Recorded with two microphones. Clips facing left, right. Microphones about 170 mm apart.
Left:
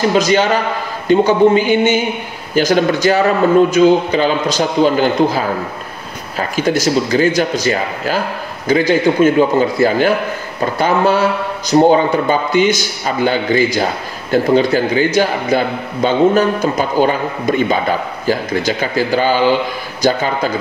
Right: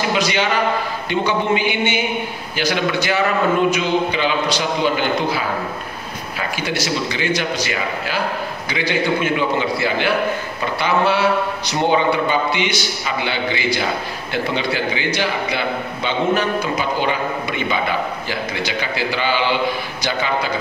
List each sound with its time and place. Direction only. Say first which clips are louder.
0.1 s a man's voice: left 6 dB; 45° left (ahead or behind)
6.5 s a man's voice: left 9 dB; 45° left (ahead or behind)